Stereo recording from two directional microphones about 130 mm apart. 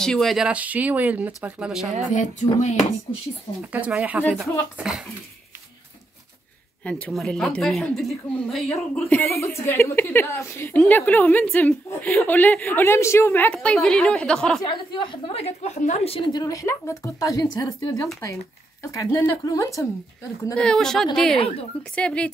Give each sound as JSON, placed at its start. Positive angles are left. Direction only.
{"t": 0.0, "sound": "speech", "side_deg": 5}
{"t": 2.1, "sound": "a sound", "side_deg": 65}
{"t": 3.7, "sound": "a woman's voice", "side_deg": -10}
{"t": 6.8, "sound": "a woman's voice", "side_deg": 10}
{"t": 8.9, "sound": "a woman's voice", "side_deg": 10}
{"t": 14.6, "sound": "a woman's voice", "side_deg": 35}
{"t": 16.3, "sound": "speech", "side_deg": 30}
{"t": 20.5, "sound": "a woman's voice", "side_deg": 5}